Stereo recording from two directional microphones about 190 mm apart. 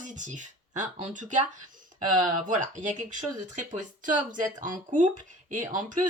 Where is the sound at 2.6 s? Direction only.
40° right (ahead or behind).